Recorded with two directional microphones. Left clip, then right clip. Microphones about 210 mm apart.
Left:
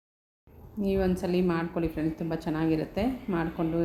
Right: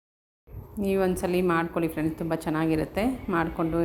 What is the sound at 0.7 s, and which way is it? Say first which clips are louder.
A woman's voice: right 3 dB; 10° right (ahead or behind).